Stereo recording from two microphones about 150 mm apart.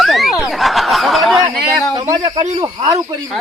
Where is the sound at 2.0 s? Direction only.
35° right (ahead or behind).